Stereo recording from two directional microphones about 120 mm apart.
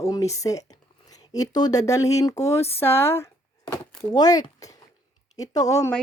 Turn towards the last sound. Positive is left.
turn(degrees=25)  # may be behind; listen again after turning